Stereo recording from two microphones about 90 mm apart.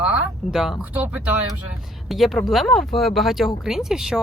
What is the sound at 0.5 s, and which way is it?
Speech, 5° right (ahead or behind).